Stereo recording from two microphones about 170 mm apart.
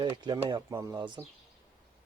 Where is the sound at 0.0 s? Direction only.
25° right (ahead or behind).